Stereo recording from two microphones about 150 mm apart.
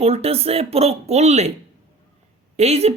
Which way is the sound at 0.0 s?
40° right (ahead or behind).